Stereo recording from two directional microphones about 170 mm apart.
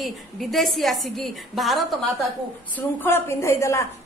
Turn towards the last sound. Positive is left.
turn(degrees=15)  # may be behind; listen again after turning